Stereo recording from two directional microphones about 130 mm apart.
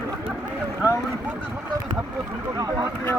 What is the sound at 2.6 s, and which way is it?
Speech, 30° right (ahead or behind).